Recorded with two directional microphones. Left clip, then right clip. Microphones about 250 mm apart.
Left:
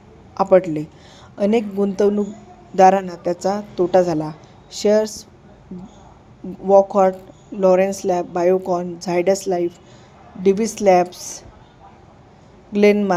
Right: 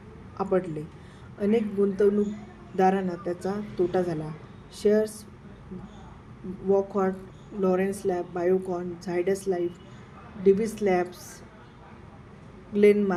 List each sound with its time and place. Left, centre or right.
0.3 s a woman's voice: left
6.7 s a woman's voice: left
12.7 s a woman's voice: left